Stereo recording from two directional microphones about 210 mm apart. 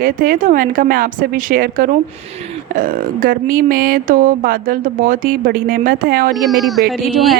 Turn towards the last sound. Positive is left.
turn(degrees=0)  # may be behind; listen again after turning